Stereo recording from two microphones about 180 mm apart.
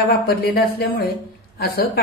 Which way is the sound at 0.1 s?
60° left (ahead or behind).